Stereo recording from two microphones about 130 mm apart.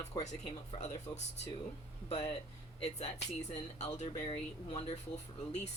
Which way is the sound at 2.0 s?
55° left (ahead or behind).